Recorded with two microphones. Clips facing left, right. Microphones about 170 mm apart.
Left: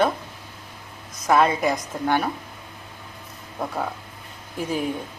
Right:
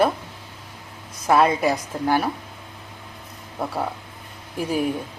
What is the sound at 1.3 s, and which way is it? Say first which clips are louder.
Speech: right 1 dB; 10° right (ahead or behind).